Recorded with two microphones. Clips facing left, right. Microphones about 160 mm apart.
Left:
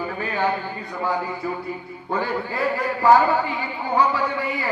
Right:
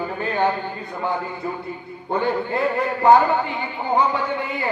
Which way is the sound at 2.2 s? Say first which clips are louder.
Right 3 dB; 25° right (ahead or behind).